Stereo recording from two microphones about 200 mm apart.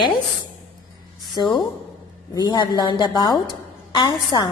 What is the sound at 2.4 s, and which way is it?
A woman's voice, 20° left (ahead or behind).